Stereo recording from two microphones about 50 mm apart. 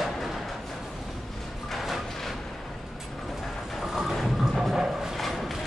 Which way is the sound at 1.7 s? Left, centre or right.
Centre.